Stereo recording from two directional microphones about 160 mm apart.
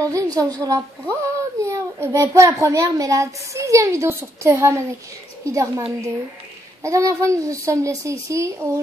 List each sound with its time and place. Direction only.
0.0 s a child's voice: 20° right (ahead or behind)